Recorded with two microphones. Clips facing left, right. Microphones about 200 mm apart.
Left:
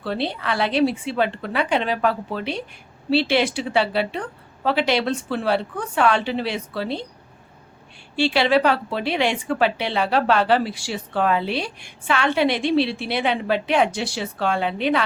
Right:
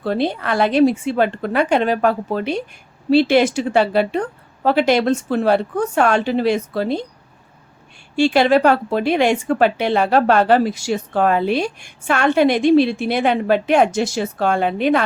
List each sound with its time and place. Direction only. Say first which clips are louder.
0.0 s speech: right 6 dB; 45° right (ahead or behind)
8.1 s speech: right 5 dB; 45° right (ahead or behind)